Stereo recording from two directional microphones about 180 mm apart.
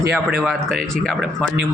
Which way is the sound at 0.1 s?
10° right (ahead or behind).